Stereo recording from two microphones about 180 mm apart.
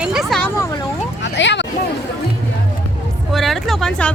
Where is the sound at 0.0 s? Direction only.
Centre (ahead or behind).